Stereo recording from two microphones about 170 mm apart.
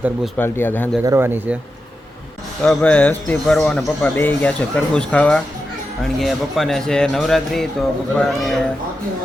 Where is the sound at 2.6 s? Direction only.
10° left (ahead or behind).